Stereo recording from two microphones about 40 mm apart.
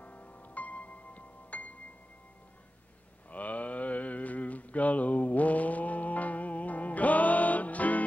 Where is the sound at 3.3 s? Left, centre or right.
Left.